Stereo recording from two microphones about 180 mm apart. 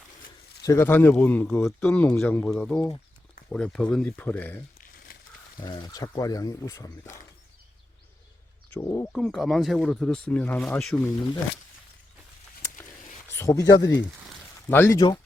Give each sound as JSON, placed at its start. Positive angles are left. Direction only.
{"t": 0.6, "sound": "speech", "side_deg": 15}
{"t": 5.6, "sound": "speech", "side_deg": 25}
{"t": 8.7, "sound": "speech", "side_deg": 15}
{"t": 9.1, "sound": "speech", "side_deg": 0}
{"t": 13.3, "sound": "speech", "side_deg": 15}